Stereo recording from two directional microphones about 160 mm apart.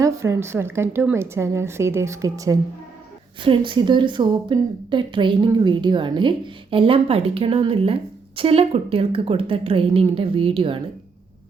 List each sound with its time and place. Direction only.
0.0 s a woman's voice: 15° right (ahead or behind)
3.4 s a woman's voice: 30° right (ahead or behind)